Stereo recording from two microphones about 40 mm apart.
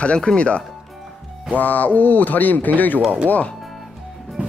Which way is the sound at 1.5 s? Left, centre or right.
Left.